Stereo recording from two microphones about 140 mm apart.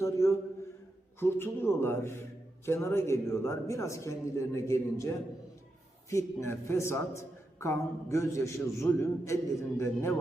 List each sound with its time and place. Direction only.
0.0 s a man's voice: 20° left (ahead or behind)